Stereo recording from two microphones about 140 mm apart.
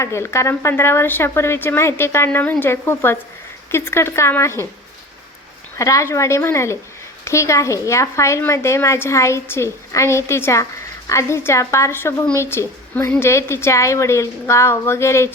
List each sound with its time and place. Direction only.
0.0 s speech: 20° left (ahead or behind)
5.7 s a woman's voice: 20° left (ahead or behind)